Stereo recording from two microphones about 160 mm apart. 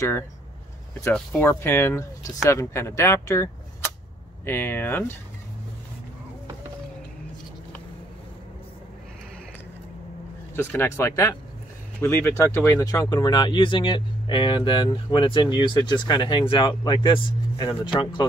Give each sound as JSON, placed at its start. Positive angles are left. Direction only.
{"t": 1.3, "sound": "speech", "side_deg": 15}
{"t": 4.5, "sound": "speech", "side_deg": 15}
{"t": 10.5, "sound": "speech", "side_deg": 15}